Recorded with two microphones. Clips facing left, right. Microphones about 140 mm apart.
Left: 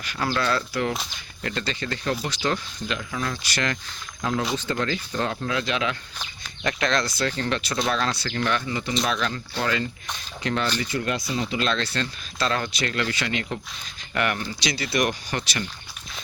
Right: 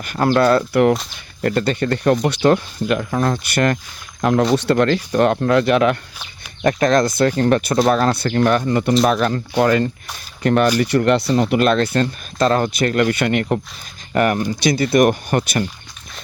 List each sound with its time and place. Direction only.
0.0 s speech: 50° right (ahead or behind)
4.2 s speech: 70° right (ahead or behind)
9.0 s speech: 45° right (ahead or behind)
10.8 s speech: 70° right (ahead or behind); by 13.4 s 55° right (ahead or behind)
14.1 s speech: 40° right (ahead or behind)
14.6 s speech: 50° right (ahead or behind)